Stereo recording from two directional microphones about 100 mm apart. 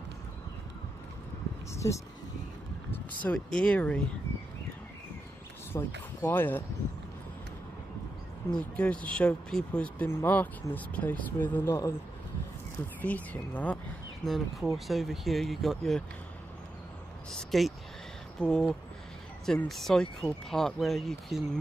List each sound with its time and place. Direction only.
1.8 s speech: 35° left (ahead or behind)
3.3 s speech: 5° left (ahead or behind)
5.7 s speech: 20° left (ahead or behind)
8.5 s speech: 10° left (ahead or behind)
13.0 s speech: 15° left (ahead or behind)
14.2 s speech: centre (ahead or behind)
17.3 s speech: 5° left (ahead or behind)